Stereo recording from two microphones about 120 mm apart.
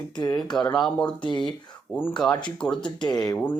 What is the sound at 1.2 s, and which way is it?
Speech, 40° left (ahead or behind).